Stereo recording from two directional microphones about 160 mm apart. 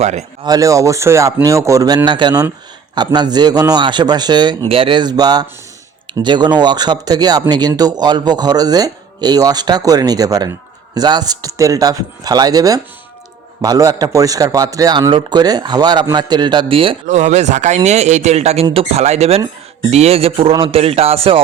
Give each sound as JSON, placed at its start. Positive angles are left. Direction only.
{"t": 0.0, "sound": "speech", "side_deg": -45}
{"t": 0.4, "sound": "speech", "side_deg": -20}